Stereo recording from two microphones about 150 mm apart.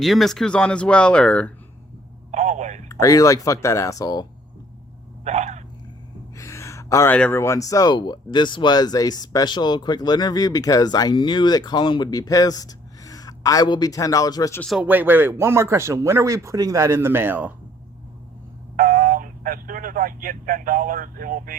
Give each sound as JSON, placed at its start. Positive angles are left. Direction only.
{"t": 0.0, "sound": "speech", "side_deg": 0}
{"t": 2.3, "sound": "telephone", "side_deg": -50}
{"t": 2.9, "sound": "speech", "side_deg": 25}
{"t": 5.2, "sound": "a sound", "side_deg": -50}
{"t": 6.3, "sound": "speech", "side_deg": 20}
{"t": 14.8, "sound": "speech", "side_deg": -10}
{"t": 18.8, "sound": "speech", "side_deg": -60}